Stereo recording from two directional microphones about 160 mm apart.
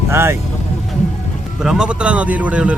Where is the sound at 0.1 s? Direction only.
15° right (ahead or behind).